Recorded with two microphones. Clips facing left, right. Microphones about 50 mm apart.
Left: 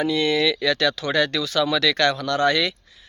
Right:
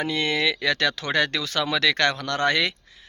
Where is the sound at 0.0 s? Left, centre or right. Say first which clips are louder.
Left 3 dB; right.